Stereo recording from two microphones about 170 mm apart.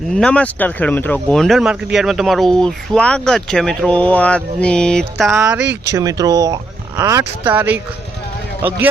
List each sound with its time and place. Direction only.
0.1 s speech: 5° left (ahead or behind)
5.3 s speech: 10° right (ahead or behind)